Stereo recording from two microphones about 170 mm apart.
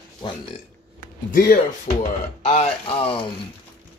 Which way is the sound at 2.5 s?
35° left (ahead or behind).